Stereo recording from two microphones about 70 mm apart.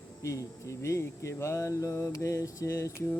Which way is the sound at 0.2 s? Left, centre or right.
Left.